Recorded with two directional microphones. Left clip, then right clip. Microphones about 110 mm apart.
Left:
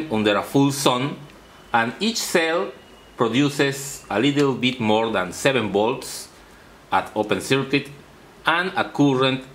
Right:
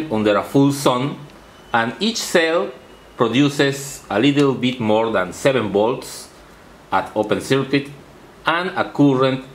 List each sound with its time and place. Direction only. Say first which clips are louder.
0.1 s a man's voice: right 3 dB; 15° left (ahead or behind)
4.7 s speech: right 3 dB; 20° left (ahead or behind)
7.2 s speech: right 3 dB; 10° left (ahead or behind)